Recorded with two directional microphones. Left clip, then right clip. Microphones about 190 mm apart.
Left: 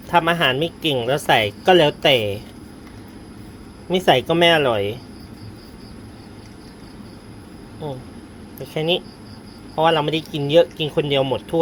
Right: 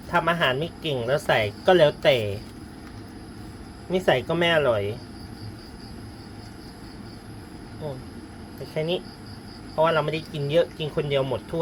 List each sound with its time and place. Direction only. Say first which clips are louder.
0.1 s speech: left 5 dB; 45° left (ahead or behind)
3.8 s speech: left 6 dB; 35° left (ahead or behind)
8.7 s speech: left 6 dB; 40° left (ahead or behind)